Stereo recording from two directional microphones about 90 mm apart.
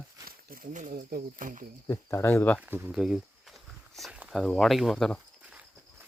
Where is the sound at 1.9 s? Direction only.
35° left (ahead or behind).